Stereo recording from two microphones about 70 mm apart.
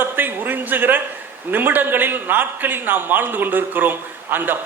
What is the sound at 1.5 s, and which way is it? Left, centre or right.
A man's voice, right.